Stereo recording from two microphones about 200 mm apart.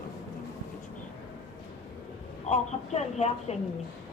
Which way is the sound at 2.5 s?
35° left (ahead or behind).